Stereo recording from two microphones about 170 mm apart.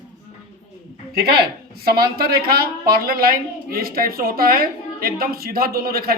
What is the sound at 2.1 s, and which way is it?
Speech, 65° right (ahead or behind).